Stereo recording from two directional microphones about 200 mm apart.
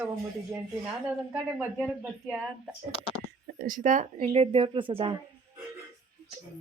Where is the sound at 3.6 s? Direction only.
40° right (ahead or behind); by 5.1 s 25° right (ahead or behind).